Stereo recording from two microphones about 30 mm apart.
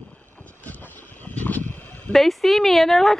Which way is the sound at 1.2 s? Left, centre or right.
Left.